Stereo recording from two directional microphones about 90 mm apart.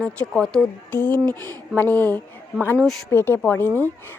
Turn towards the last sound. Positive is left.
turn(degrees=20)  # may be behind; listen again after turning